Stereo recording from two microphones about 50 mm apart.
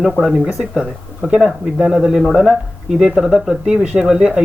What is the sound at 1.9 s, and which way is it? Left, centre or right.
Speech, centre.